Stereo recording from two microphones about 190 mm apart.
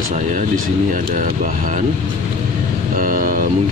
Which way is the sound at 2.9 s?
45° right (ahead or behind).